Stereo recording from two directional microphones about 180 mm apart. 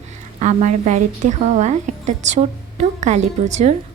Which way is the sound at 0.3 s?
40° right (ahead or behind).